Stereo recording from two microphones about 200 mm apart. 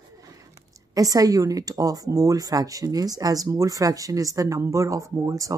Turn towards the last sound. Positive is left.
turn(degrees=-15)  # may be behind; listen again after turning